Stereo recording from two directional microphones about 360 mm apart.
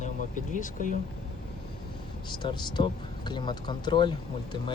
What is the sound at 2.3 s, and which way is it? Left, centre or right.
Speech, centre.